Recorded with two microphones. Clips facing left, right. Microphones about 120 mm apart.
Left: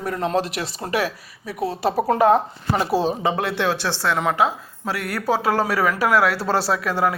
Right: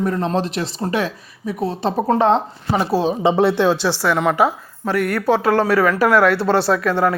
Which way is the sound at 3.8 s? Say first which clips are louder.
Right 4 dB; 10° right (ahead or behind).